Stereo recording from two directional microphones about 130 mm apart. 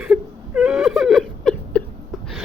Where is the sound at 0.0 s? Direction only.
5° right (ahead or behind).